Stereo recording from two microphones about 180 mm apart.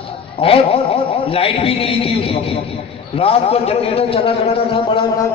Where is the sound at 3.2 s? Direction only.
30° left (ahead or behind).